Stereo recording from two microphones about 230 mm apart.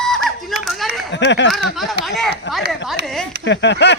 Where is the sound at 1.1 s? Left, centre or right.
Left.